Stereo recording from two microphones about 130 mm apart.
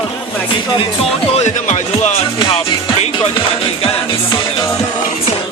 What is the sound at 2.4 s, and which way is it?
Music, 50° left (ahead or behind).